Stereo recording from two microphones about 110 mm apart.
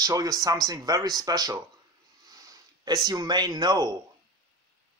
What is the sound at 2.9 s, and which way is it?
Speech, 40° right (ahead or behind).